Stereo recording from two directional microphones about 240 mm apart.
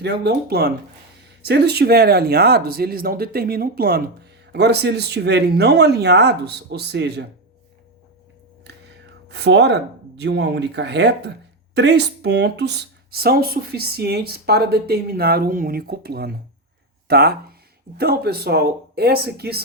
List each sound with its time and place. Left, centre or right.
0.0 s speech: right
9.3 s speech: right